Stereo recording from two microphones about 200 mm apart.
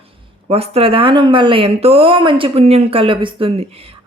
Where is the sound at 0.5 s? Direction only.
30° right (ahead or behind).